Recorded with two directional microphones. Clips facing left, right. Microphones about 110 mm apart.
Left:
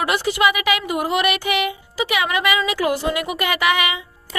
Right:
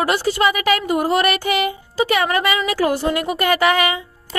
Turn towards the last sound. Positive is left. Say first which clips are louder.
# right 3 dB
turn(degrees=-40)  # may be behind; listen again after turning